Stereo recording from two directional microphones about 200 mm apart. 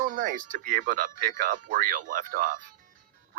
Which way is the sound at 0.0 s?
40° right (ahead or behind).